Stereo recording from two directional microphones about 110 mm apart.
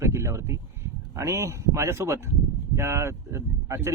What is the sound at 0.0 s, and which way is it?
Speech, 25° right (ahead or behind).